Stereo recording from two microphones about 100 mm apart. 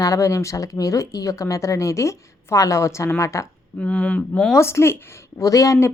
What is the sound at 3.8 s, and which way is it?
Speech, 10° left (ahead or behind).